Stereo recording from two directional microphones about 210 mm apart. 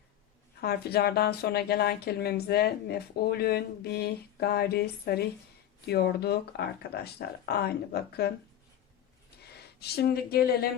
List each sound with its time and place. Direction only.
0.6 s speech: 50° left (ahead or behind)
9.4 s speech: 50° left (ahead or behind)